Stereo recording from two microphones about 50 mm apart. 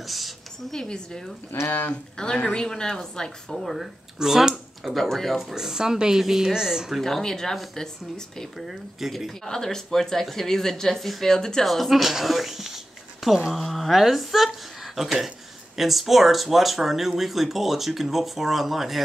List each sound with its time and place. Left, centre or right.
0.0 s a sound: centre
0.7 s speech: centre
3.5 s speech: centre
4.2 s a sound: centre
5.0 s speech: centre
5.5 s speech: centre
7.0 s speech: centre
9.4 s speech: centre
11.6 s speech: centre